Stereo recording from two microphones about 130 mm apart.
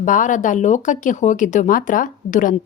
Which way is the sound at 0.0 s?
80° left.